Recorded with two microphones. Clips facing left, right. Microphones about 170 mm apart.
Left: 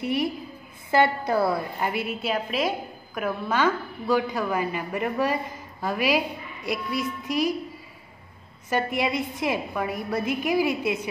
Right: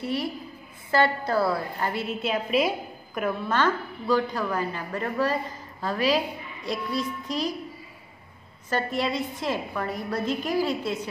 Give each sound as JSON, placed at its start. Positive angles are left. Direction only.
{"t": 0.0, "sound": "a woman's voice", "side_deg": 15}
{"t": 2.3, "sound": "a woman's voice", "side_deg": 0}
{"t": 8.6, "sound": "a woman's voice", "side_deg": 15}